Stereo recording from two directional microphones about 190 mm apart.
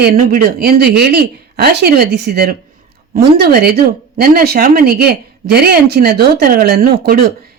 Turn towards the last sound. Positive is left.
turn(degrees=-50)  # may be behind; listen again after turning